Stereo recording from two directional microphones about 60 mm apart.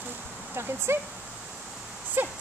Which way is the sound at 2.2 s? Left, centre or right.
Right.